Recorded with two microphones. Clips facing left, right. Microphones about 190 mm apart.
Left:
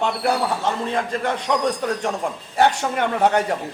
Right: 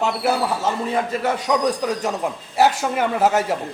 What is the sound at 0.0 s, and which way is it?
A man's voice, 5° right (ahead or behind).